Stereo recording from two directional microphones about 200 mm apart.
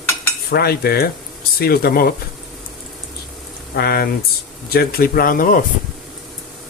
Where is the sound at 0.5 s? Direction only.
50° left (ahead or behind).